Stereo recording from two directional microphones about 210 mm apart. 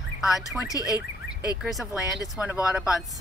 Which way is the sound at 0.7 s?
15° left (ahead or behind).